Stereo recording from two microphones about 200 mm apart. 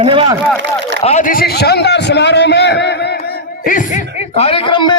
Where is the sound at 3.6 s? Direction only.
40° left (ahead or behind); by 4.9 s 25° left (ahead or behind).